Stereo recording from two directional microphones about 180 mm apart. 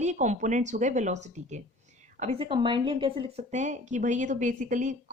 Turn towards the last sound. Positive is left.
turn(degrees=-45)  # may be behind; listen again after turning